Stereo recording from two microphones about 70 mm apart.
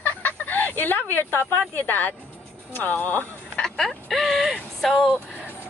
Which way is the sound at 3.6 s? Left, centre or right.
Centre.